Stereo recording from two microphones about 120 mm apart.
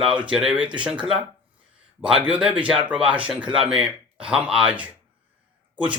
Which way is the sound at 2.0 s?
10° right (ahead or behind).